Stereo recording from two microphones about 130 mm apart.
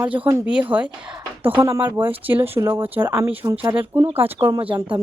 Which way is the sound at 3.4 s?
30° right (ahead or behind).